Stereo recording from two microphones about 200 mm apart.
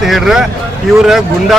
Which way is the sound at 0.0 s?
Centre (ahead or behind).